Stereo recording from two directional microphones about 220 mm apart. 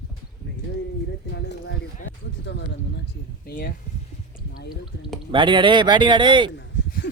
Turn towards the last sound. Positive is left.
turn(degrees=40)  # may be behind; listen again after turning